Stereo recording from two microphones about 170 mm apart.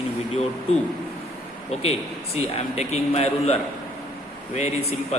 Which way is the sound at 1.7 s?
35° left (ahead or behind).